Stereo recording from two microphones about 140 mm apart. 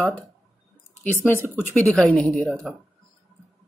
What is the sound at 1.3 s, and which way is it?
Speech, 15° left (ahead or behind).